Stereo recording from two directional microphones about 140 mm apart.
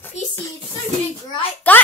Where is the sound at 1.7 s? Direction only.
15° left (ahead or behind).